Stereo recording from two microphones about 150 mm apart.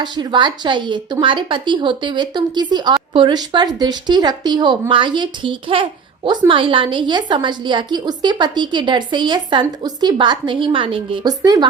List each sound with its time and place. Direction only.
0.0 s a woman's voice: 30° right (ahead or behind)